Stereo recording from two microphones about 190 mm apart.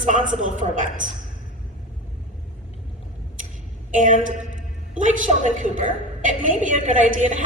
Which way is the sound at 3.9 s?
45° right (ahead or behind).